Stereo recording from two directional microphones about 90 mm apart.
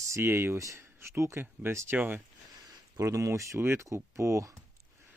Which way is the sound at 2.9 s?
40° right (ahead or behind).